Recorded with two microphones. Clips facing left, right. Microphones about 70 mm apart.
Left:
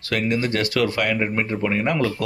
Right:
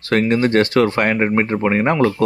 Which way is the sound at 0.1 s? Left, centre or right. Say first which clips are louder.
Right 7 dB; right.